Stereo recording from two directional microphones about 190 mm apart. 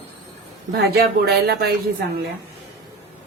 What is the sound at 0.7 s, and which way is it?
Speech, 55° right (ahead or behind).